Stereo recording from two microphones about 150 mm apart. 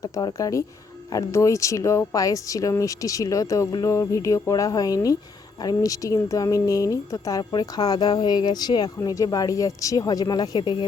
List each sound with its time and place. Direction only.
0.0 s speech: 25° left (ahead or behind)